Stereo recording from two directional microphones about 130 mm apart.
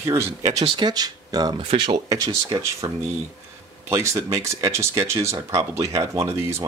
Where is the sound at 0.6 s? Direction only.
40° right (ahead or behind).